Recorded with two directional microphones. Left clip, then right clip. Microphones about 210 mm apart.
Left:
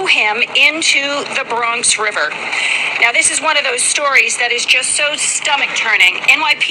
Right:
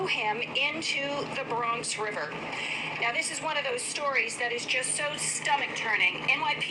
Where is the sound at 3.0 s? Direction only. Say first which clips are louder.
Left 16 dB; 25° left (ahead or behind).